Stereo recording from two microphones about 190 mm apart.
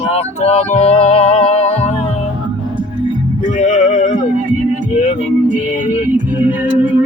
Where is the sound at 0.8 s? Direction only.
35° left (ahead or behind).